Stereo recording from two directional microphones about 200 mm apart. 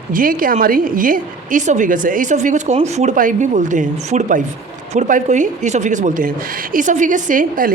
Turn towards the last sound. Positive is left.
turn(degrees=-45)  # may be behind; listen again after turning